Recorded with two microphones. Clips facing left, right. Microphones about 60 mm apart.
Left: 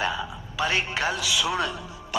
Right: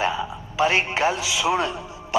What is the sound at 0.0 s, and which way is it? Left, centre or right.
A man's voice, right.